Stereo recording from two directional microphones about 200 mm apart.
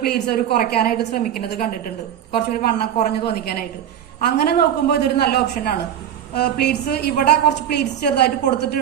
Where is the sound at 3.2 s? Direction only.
50° left (ahead or behind).